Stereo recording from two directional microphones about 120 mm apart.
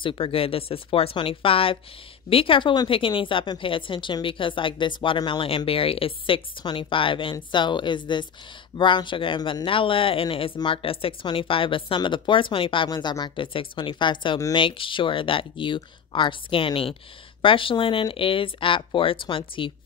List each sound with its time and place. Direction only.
0.0 s a woman's voice: 45° left (ahead or behind)